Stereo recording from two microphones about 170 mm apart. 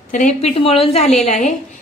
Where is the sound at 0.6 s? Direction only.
35° left (ahead or behind).